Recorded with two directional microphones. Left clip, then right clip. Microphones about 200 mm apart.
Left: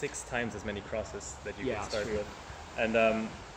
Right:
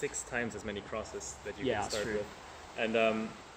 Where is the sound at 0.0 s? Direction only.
Centre (ahead or behind).